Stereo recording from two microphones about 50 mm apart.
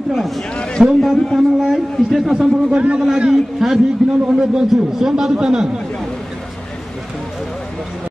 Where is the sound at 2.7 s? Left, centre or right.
Right.